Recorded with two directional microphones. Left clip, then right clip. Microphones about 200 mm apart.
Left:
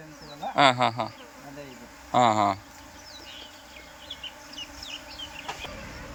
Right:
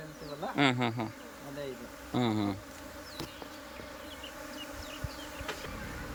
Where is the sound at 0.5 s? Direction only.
10° right (ahead or behind).